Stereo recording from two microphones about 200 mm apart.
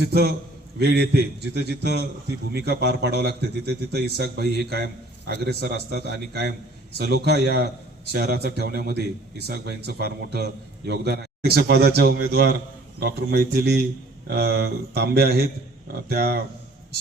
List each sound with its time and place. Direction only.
0.1 s a man's voice: 50° right (ahead or behind)